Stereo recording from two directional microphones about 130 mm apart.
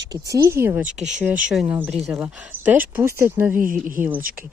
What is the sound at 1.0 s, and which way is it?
Speech, 5° right (ahead or behind).